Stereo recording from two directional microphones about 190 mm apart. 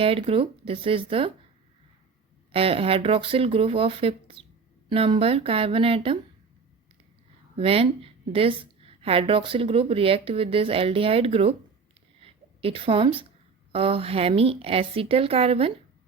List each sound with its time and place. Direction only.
0.0 s a woman's voice: 30° right (ahead or behind)
2.5 s a woman's voice: 30° right (ahead or behind)
7.5 s a woman's voice: 30° right (ahead or behind)
12.2 s a sound: 30° right (ahead or behind)
13.7 s a woman's voice: 30° right (ahead or behind)